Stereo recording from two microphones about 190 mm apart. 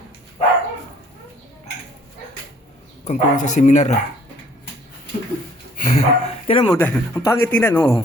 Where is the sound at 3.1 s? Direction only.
40° left (ahead or behind).